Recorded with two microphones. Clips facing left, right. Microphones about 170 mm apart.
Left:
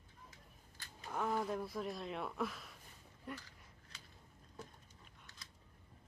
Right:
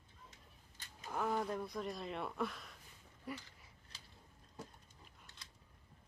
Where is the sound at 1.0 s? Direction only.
Centre (ahead or behind).